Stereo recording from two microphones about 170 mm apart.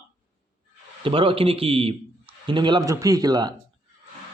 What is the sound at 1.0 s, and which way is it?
Speech, 30° right (ahead or behind).